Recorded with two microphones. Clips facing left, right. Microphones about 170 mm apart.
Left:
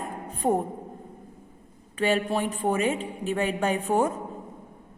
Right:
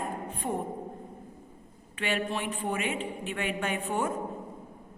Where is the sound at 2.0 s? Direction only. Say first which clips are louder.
Left 6 dB; 40° left (ahead or behind).